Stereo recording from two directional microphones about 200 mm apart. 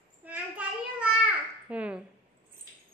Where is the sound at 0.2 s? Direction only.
10° right (ahead or behind).